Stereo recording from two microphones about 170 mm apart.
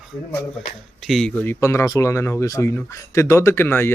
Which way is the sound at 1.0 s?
Centre (ahead or behind).